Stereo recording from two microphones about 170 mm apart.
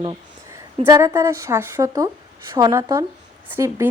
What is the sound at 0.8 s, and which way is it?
Speech, 20° right (ahead or behind).